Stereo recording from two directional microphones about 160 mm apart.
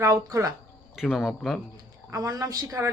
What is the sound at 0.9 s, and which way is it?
Speech, centre (ahead or behind).